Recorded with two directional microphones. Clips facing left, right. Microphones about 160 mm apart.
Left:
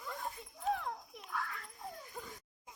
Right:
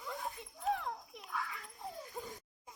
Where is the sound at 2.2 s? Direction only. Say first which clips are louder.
Right 4 dB; 20° right (ahead or behind).